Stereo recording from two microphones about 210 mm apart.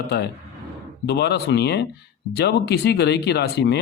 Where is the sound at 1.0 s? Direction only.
55° left (ahead or behind).